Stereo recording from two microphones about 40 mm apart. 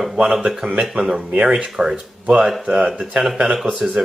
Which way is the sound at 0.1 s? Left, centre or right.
Centre.